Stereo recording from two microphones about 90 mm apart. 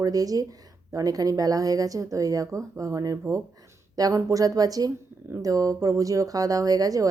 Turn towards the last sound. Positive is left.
turn(degrees=-40)  # may be behind; listen again after turning